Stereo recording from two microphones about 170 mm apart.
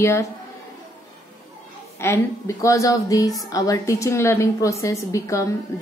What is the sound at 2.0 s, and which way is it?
A woman's voice, 15° left (ahead or behind).